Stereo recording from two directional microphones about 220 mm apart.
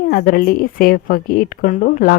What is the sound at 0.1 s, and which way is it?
Speech, 40° left (ahead or behind).